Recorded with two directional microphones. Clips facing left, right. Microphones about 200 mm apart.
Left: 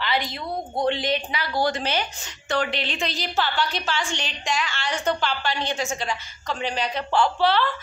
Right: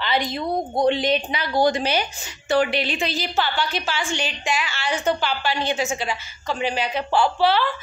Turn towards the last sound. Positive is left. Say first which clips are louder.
# right 1 dB
turn(degrees=-5)  # may be behind; listen again after turning